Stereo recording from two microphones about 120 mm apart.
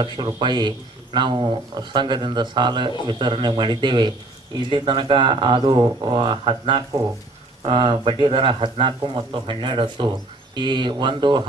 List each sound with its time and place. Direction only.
0.0 s speech: 40° right (ahead or behind)